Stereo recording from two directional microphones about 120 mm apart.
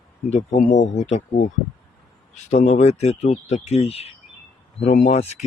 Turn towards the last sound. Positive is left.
turn(degrees=65)  # may be behind; listen again after turning